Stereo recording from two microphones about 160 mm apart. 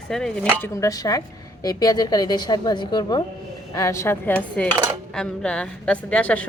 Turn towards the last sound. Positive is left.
turn(degrees=10)  # may be behind; listen again after turning